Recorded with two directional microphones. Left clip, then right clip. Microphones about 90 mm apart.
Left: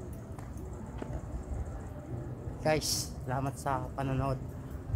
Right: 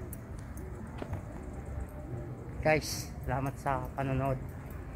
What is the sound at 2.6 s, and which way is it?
Speech, 25° right (ahead or behind).